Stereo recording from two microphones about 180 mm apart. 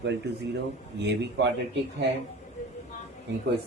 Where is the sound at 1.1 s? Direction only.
75° right (ahead or behind).